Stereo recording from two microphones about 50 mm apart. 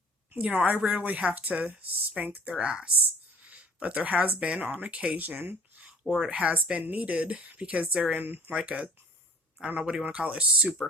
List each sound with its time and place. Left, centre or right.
0.3 s speech: right
2.5 s speech: centre
5.2 s speech: right
6.3 s speech: right
8.1 s speech: right
8.5 s speech: right